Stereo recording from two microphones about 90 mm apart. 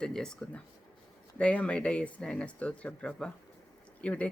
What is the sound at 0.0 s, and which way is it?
Speech, 10° left (ahead or behind).